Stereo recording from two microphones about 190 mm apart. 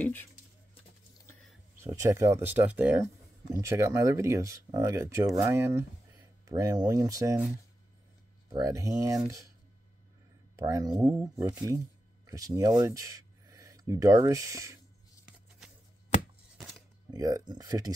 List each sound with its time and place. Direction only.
0.0 s speech: 10° left (ahead or behind)
1.8 s speech: 15° right (ahead or behind)
8.5 s speech: 20° right (ahead or behind)
10.5 s speech: 20° right (ahead or behind)
16.5 s a sound: centre (ahead or behind)
17.1 s speech: 20° right (ahead or behind)